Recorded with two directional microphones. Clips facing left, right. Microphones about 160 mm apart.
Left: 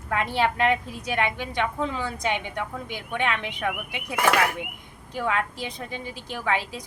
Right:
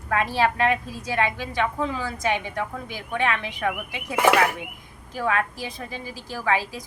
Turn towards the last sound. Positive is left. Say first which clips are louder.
# right 2 dB
turn(degrees=20)  # may be behind; listen again after turning